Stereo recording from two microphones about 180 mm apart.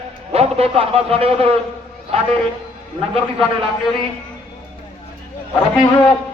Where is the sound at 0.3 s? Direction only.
35° right (ahead or behind).